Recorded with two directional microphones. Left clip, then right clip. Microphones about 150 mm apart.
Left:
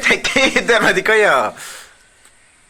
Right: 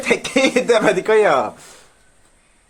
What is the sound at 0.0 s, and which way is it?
Speech, centre (ahead or behind).